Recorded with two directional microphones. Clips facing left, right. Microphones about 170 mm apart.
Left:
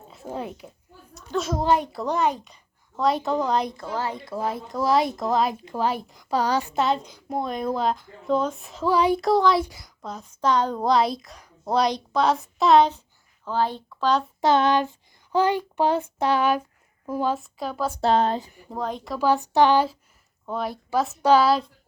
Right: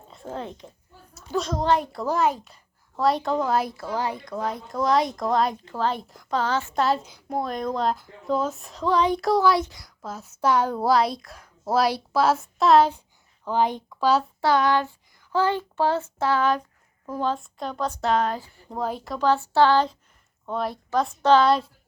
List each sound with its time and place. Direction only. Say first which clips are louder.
0.1 s a child's voice: left 1 dB; 10° left (ahead or behind); by 4.2 s 10° right (ahead or behind)
4.3 s speech: left 1 dB; 5° left (ahead or behind)
5.6 s a child's voice: left 1 dB; 10° left (ahead or behind)
6.0 s speech: left 1 dB; centre (ahead or behind)
6.3 s a child's voice: left 2 dB; 15° left (ahead or behind)
6.7 s speech: even; centre (ahead or behind)
9.2 s speech: left 1 dB; centre (ahead or behind)
13.4 s speech: right 2 dB; 15° right (ahead or behind)
14.4 s a child's voice: left 3 dB; 20° left (ahead or behind); by 17.9 s 5° left (ahead or behind)
18.0 s speech: left 3 dB; 30° left (ahead or behind)
18.4 s speech: left 4 dB; 15° left (ahead or behind)
18.7 s a child's voice: even; 5° right (ahead or behind)